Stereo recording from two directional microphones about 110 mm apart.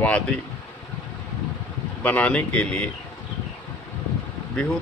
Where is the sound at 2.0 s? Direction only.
15° left (ahead or behind).